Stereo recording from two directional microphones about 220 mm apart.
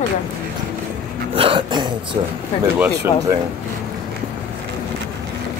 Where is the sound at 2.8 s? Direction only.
10° right (ahead or behind).